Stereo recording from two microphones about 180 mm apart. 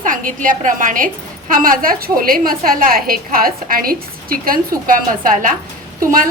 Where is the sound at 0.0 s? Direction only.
45° right (ahead or behind).